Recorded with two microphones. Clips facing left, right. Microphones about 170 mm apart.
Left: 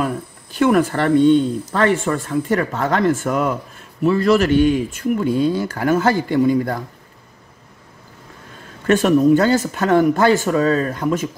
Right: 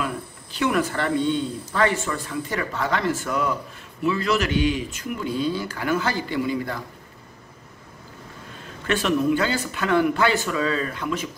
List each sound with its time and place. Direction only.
0.0 s cricket: 50° left (ahead or behind)
1.7 s speech: 55° left (ahead or behind)
8.8 s speech: 45° left (ahead or behind)